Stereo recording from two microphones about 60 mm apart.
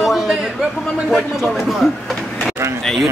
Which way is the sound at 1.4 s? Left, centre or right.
Centre.